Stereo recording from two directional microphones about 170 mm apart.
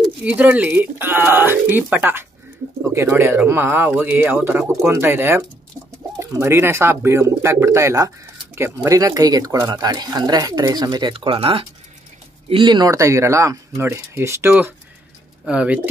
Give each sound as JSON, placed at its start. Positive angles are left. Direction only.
{"t": 0.2, "sound": "speech", "side_deg": -10}